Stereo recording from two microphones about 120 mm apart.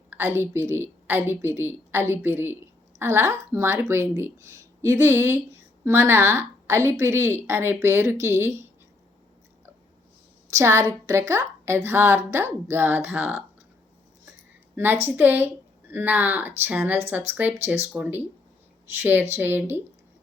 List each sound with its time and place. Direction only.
0.1 s a woman's voice: 20° right (ahead or behind)
10.5 s a woman's voice: 25° right (ahead or behind)
15.0 s a woman's voice: 15° right (ahead or behind)